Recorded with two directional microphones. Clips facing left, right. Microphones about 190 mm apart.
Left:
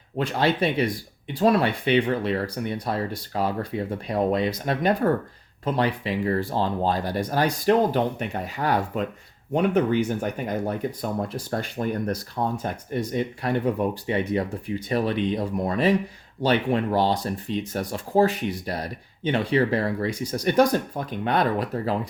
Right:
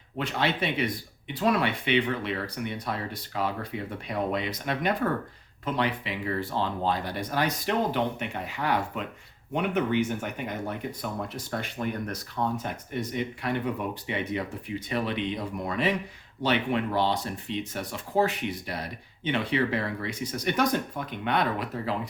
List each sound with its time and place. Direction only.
0.2 s speech: 40° left (ahead or behind)